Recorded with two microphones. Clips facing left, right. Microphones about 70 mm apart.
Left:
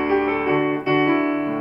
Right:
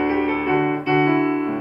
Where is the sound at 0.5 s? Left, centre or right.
Centre.